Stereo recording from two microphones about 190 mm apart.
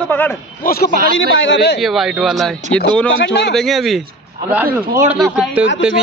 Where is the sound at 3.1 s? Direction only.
65° left (ahead or behind).